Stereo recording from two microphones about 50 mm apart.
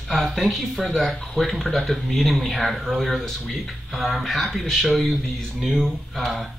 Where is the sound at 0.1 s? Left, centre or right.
Centre.